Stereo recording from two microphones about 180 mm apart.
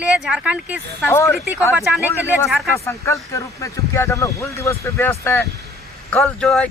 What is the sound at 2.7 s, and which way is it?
Speech, 15° left (ahead or behind).